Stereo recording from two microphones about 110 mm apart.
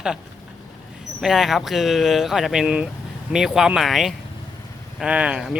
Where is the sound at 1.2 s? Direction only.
5° right (ahead or behind).